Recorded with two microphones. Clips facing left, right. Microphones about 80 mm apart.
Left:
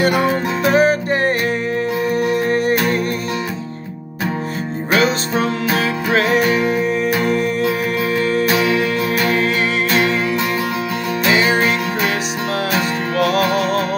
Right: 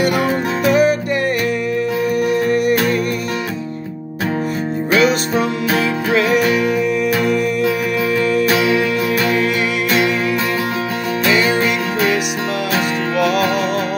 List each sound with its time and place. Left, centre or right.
0.0 s music: left
6.1 s music: left
8.2 s music: left
11.2 s music: left